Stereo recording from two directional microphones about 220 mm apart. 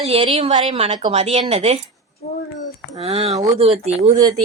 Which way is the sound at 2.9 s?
30° right (ahead or behind).